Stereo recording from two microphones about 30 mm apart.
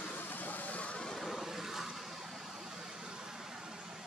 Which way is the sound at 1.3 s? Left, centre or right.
Centre.